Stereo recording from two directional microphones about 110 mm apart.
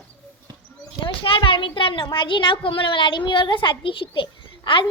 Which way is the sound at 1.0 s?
50° left (ahead or behind).